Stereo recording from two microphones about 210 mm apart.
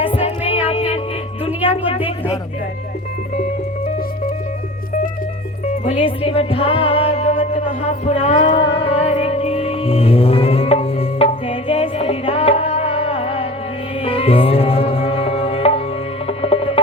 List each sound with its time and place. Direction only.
0.1 s music: 30° left (ahead or behind)
5.8 s music: 25° left (ahead or behind)
8.4 s a sound: 20° left (ahead or behind)
8.8 s music: 30° left (ahead or behind)